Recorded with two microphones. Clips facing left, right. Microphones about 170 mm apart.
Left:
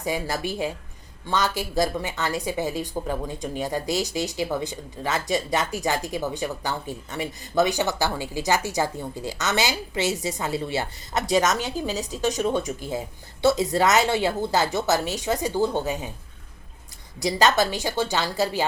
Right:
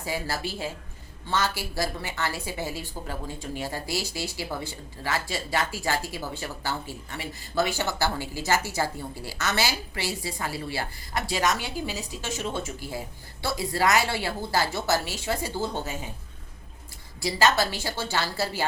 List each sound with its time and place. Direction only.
0.0 s a woman's voice: 20° left (ahead or behind)
17.2 s a woman's voice: 20° left (ahead or behind)